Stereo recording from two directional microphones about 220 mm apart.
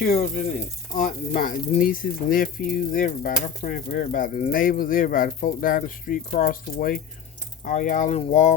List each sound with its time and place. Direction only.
0.0 s speech: 35° left (ahead or behind)